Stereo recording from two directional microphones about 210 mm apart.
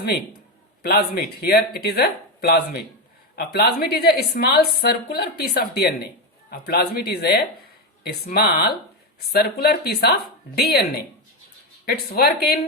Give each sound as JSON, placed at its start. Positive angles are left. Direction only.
{"t": 0.8, "sound": "a woman's voice", "side_deg": 50}
{"t": 11.9, "sound": "a woman's voice", "side_deg": 50}